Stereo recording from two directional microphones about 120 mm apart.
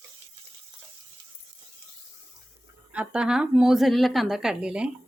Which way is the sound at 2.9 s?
10° right (ahead or behind).